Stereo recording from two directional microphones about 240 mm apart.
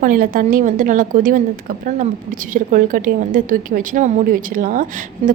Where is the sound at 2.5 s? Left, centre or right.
Right.